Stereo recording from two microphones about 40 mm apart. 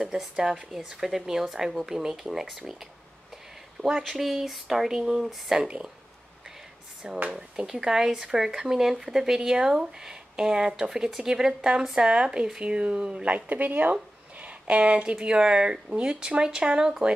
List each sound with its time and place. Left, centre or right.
0.0 s speech: centre
3.8 s speech: right
4.1 s speech: centre
4.9 s speech: centre
7.0 s speech: right
13.5 s speech: right; by 17.1 s centre